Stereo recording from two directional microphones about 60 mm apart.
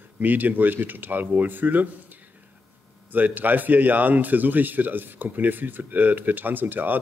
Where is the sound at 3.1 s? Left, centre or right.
Right.